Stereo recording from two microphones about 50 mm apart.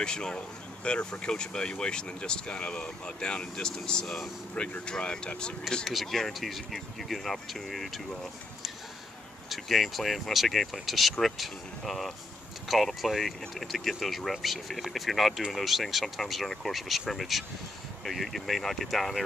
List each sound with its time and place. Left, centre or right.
0.0 s speech: centre
5.9 s speech: centre
9.5 s speech: centre